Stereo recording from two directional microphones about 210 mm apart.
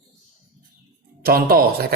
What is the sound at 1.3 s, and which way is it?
Speech, 45° right (ahead or behind).